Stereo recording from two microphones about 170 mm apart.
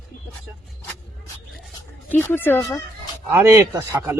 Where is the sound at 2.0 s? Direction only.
10° left (ahead or behind).